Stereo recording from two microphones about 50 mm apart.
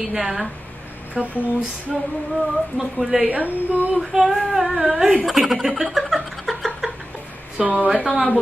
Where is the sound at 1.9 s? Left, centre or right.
Centre.